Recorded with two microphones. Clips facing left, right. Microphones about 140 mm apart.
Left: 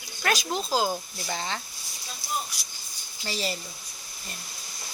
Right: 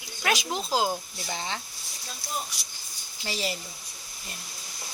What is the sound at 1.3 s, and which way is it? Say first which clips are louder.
Speech: left 2 dB; 15° right (ahead or behind).